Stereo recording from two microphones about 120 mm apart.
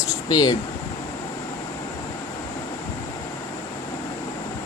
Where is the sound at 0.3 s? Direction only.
35° left (ahead or behind).